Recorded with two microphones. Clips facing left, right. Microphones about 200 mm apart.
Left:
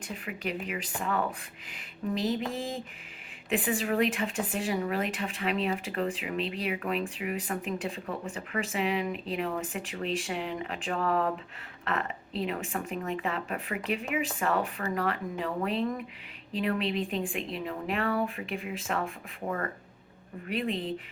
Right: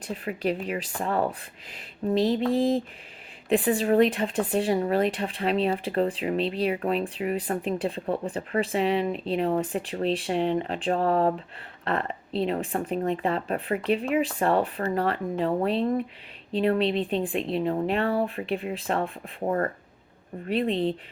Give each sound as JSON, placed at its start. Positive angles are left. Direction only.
{"t": 0.1, "sound": "speech", "side_deg": -35}